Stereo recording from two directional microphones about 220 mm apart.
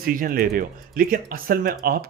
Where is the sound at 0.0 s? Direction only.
40° right (ahead or behind).